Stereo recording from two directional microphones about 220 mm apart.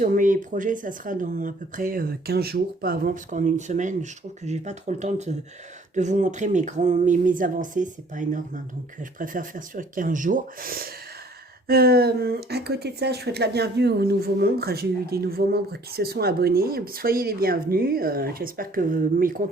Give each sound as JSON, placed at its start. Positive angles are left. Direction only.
{"t": 0.0, "sound": "speech", "side_deg": -35}